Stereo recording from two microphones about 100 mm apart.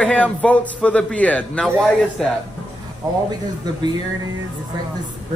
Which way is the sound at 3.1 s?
35° right (ahead or behind).